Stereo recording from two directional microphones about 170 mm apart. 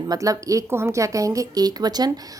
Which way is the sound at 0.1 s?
20° right (ahead or behind).